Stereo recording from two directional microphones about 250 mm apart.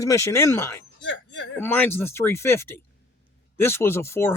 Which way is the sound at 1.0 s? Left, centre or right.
Left.